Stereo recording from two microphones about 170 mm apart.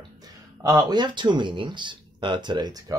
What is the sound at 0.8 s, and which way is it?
Speech, 25° right (ahead or behind).